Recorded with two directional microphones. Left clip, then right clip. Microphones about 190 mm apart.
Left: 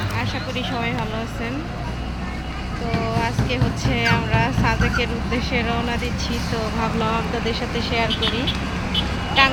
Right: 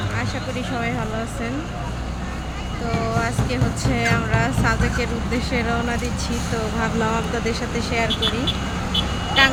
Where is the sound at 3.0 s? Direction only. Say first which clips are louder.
Even; 15° right (ahead or behind).